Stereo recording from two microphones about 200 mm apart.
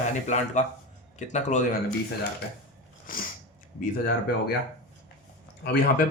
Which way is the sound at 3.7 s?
45° left (ahead or behind).